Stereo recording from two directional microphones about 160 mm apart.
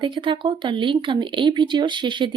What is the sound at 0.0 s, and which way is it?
Speech, 30° right (ahead or behind).